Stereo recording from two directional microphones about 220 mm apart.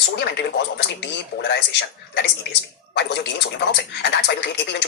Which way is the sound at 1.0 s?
50° left (ahead or behind).